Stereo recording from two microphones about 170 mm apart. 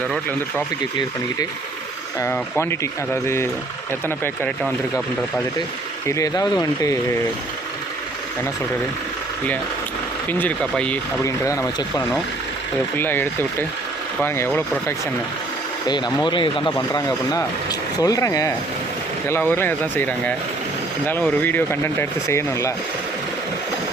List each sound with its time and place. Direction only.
2.2 s speech: 15° left (ahead or behind)
4.2 s speech: 5° left (ahead or behind)
6.1 s speech: 20° left (ahead or behind)
10.2 s speech: 10° left (ahead or behind)
11.4 s speech: 20° left (ahead or behind)
15.9 s speech: 25° left (ahead or behind)